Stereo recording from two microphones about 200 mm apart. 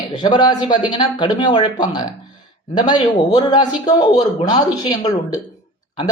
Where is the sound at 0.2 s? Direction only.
20° left (ahead or behind).